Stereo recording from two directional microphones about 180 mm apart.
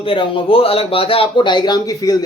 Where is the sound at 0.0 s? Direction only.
30° left (ahead or behind).